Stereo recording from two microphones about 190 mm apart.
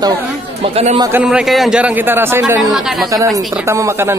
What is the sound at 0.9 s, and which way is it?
Speech, 20° right (ahead or behind).